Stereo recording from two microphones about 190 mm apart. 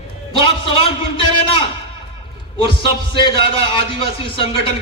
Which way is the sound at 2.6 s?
25° left (ahead or behind).